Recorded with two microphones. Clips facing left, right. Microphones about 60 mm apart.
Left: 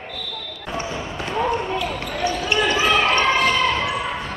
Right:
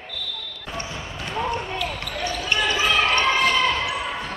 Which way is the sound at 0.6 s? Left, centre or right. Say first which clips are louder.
Left 5 dB; centre.